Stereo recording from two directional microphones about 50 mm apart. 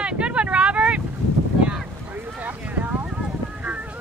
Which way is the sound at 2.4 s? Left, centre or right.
Right.